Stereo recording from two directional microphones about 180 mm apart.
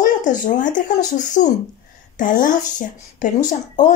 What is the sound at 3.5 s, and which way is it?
Speech, 45° left (ahead or behind).